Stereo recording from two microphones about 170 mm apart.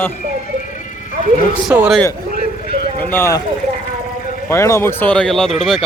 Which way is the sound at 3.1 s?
15° left (ahead or behind).